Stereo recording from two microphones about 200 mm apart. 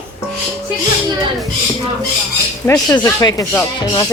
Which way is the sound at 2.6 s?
15° left (ahead or behind).